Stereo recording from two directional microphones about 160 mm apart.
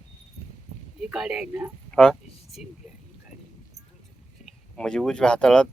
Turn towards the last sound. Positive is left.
turn(degrees=5)  # may be behind; listen again after turning